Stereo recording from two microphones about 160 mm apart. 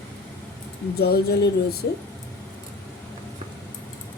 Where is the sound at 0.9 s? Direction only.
80° left.